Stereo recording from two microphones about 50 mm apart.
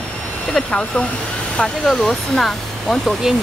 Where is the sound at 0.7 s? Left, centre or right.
Left.